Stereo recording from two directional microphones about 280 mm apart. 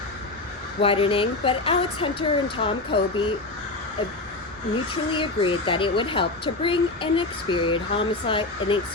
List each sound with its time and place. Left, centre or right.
0.8 s speech: centre
5.1 s speech: centre